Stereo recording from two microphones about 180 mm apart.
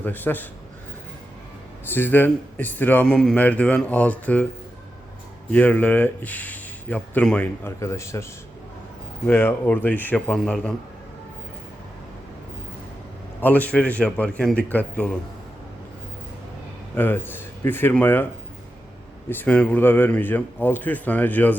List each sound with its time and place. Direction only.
0.0 s speech: 10° left (ahead or behind)
1.9 s speech: 10° left (ahead or behind)
5.5 s speech: 10° left (ahead or behind)
13.4 s speech: 10° left (ahead or behind)
16.9 s speech: 10° left (ahead or behind)
19.3 s speech: 10° left (ahead or behind)